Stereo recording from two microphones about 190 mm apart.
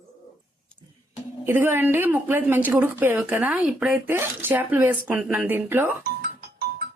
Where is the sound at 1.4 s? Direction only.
10° right (ahead or behind).